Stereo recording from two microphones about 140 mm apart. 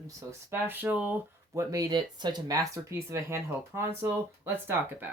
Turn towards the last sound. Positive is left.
turn(degrees=-15)  # may be behind; listen again after turning